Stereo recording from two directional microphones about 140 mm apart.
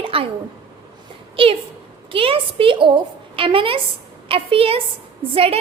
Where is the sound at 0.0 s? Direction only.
40° right (ahead or behind).